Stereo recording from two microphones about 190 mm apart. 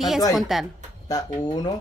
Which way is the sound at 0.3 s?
Centre (ahead or behind).